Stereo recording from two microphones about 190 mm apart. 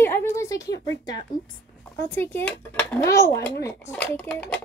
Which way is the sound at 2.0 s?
10° left (ahead or behind).